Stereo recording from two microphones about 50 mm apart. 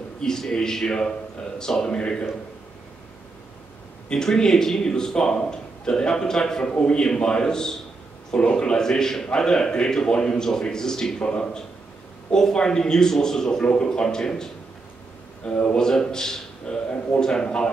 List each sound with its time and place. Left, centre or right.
0.2 s a man's voice: centre
4.1 s a man's voice: centre